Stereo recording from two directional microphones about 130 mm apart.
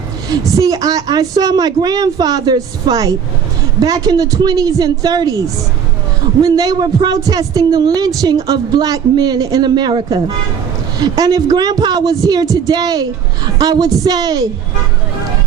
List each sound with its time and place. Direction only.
0.3 s a woman's voice: 30° right (ahead or behind)
6.4 s speech: 30° right (ahead or behind)
11.0 s a woman's voice: 30° right (ahead or behind)